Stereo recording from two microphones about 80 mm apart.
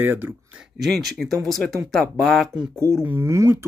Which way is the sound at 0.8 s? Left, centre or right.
Centre.